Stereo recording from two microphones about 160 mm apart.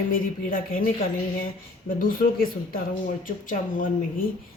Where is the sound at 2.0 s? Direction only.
60° left (ahead or behind).